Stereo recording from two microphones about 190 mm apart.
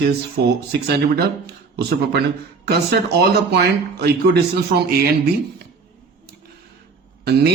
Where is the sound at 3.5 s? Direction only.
60° right (ahead or behind).